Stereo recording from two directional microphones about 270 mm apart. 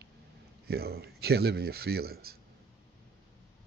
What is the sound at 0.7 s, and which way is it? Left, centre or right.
Speech, right.